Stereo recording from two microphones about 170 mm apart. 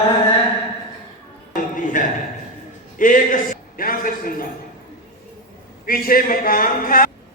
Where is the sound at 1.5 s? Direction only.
50° left (ahead or behind).